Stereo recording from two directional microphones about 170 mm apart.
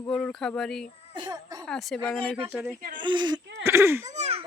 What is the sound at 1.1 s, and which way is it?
Speech, 25° right (ahead or behind).